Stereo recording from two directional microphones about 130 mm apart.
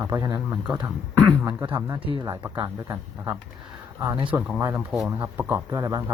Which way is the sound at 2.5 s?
25° right (ahead or behind).